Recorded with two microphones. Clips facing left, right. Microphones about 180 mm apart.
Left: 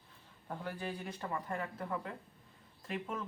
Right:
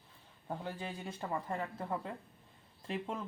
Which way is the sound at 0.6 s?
25° right (ahead or behind).